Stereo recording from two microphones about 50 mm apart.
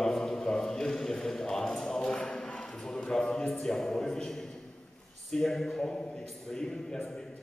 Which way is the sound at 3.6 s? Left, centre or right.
Centre.